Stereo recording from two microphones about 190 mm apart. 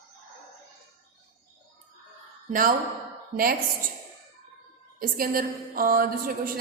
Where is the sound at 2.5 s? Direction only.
45° right (ahead or behind).